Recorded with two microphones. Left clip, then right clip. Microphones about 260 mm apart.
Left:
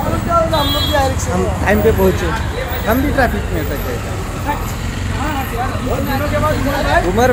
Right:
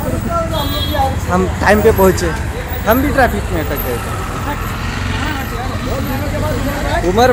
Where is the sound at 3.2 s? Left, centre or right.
Centre.